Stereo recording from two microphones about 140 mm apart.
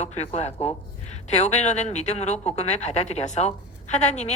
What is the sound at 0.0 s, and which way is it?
Speech, 50° left (ahead or behind).